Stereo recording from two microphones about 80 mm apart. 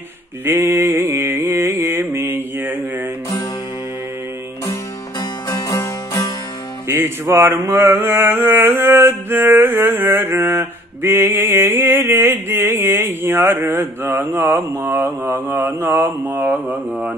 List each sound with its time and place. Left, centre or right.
0.5 s mantra: right
5.5 s music: left
6.9 s mantra: right
16.4 s mantra: centre